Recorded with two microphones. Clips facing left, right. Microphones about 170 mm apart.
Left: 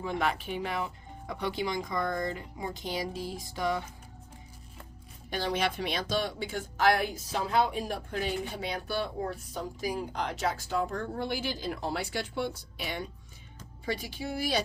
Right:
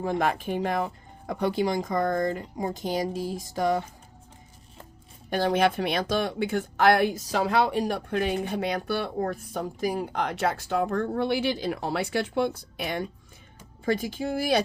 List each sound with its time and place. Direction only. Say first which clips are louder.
0.0 s speech: right 5 dB; 45° right (ahead or behind)
5.3 s speech: right 7 dB; 50° right (ahead or behind)